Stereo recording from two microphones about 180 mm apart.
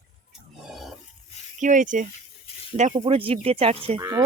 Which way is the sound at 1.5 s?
45° right (ahead or behind).